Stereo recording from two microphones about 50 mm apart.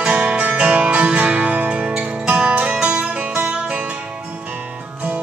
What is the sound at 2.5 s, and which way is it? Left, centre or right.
Music, centre.